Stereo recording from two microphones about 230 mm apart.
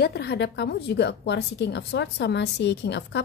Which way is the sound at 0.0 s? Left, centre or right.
Left.